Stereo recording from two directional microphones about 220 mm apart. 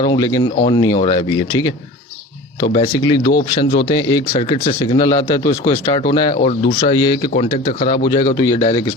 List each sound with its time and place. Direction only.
0.1 s speech: 15° left (ahead or behind)
2.7 s speech: 20° left (ahead or behind)